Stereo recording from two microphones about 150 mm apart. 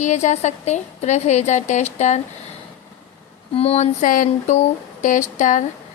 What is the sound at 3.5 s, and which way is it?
A woman's voice, 45° left (ahead or behind).